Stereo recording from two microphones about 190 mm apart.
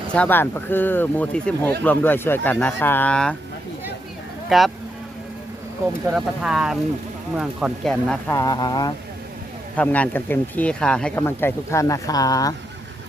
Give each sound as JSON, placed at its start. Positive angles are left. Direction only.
{"t": 0.1, "sound": "speech", "side_deg": 10}
{"t": 4.4, "sound": "speech", "side_deg": 0}
{"t": 6.1, "sound": "speech", "side_deg": -5}
{"t": 8.4, "sound": "speech", "side_deg": 20}
{"t": 9.7, "sound": "speech", "side_deg": 5}